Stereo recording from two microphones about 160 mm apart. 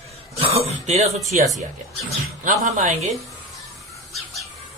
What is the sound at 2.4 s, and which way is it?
Speech, 55° right (ahead or behind).